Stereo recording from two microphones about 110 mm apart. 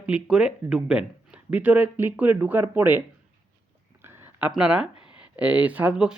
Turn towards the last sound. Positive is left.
turn(degrees=-10)  # may be behind; listen again after turning